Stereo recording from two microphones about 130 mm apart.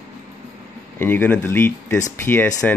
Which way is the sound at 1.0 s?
15° left (ahead or behind).